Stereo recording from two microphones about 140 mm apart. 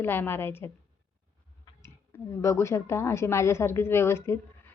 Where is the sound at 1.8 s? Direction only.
20° left (ahead or behind).